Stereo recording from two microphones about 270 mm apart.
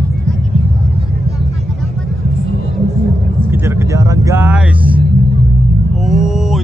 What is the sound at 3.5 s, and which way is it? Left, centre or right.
Vehicle, centre.